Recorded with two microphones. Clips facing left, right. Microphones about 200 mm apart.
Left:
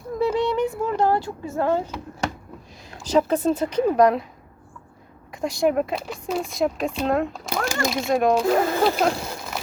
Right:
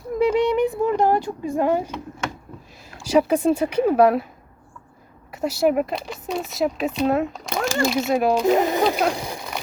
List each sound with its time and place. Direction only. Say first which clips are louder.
0.2 s a sound: right 3 dB; 15° right (ahead or behind)
3.0 s speech: right 2 dB; 10° right (ahead or behind)
5.3 s speech: right 2 dB; 5° right (ahead or behind)
8.4 s speech: right 1 dB; 20° right (ahead or behind)